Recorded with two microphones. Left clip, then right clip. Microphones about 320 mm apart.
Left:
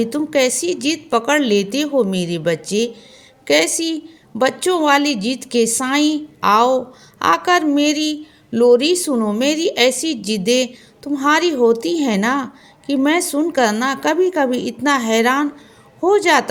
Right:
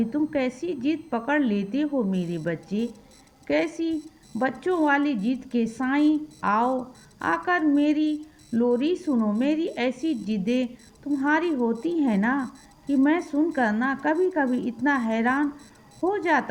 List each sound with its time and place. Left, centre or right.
0.0 s a woman's voice: right